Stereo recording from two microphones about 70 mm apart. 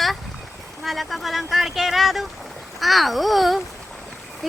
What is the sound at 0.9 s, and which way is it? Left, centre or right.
Speech, centre.